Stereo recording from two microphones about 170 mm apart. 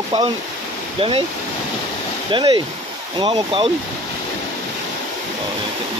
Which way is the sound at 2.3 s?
30° right (ahead or behind).